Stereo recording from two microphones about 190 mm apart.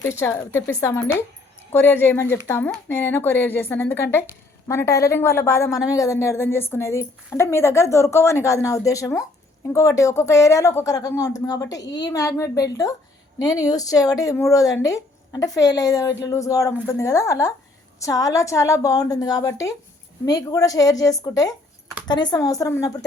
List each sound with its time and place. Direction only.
0.0 s a woman's voice: 15° left (ahead or behind)